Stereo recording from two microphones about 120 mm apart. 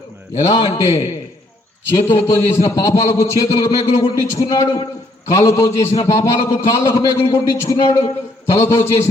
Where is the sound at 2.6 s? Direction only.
30° left (ahead or behind).